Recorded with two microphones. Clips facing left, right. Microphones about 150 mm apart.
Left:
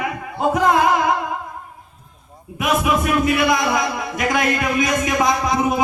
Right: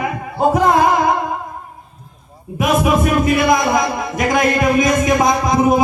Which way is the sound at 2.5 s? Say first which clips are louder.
Right 4 dB; 40° right (ahead or behind).